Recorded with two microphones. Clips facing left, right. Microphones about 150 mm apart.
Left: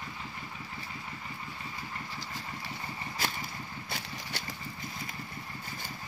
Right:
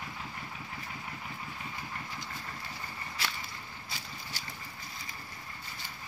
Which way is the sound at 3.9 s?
60° left (ahead or behind).